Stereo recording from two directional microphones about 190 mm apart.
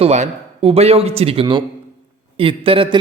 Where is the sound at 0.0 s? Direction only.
35° right (ahead or behind).